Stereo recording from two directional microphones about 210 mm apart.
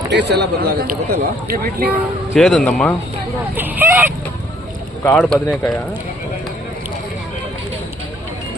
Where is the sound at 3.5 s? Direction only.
10° right (ahead or behind).